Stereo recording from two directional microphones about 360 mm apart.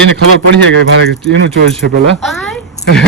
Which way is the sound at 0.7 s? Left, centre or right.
Right.